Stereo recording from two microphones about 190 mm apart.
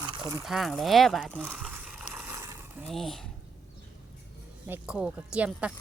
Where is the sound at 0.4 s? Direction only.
Centre (ahead or behind).